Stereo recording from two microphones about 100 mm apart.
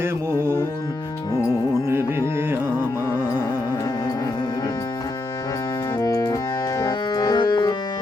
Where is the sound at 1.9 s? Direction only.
25° right (ahead or behind).